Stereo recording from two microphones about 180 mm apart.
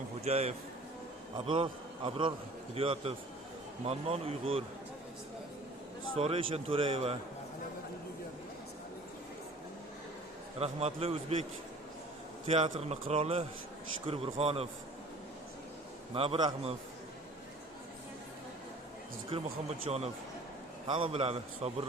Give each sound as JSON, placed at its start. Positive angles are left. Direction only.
{"t": 0.3, "sound": "a man's voice", "side_deg": -35}
{"t": 6.1, "sound": "speech", "side_deg": -35}
{"t": 10.6, "sound": "speech", "side_deg": -35}
{"t": 12.5, "sound": "speech", "side_deg": -35}
{"t": 16.1, "sound": "speech", "side_deg": -30}
{"t": 19.3, "sound": "speech", "side_deg": -30}
{"t": 20.9, "sound": "speech", "side_deg": -30}